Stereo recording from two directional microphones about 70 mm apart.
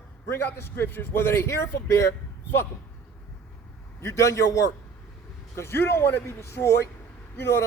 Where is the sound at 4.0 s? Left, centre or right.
Left.